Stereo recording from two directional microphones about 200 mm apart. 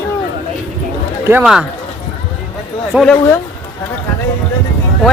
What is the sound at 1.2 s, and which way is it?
Speech, 5° right (ahead or behind).